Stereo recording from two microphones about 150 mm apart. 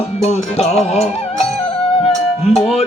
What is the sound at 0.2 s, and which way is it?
Music, 45° left (ahead or behind).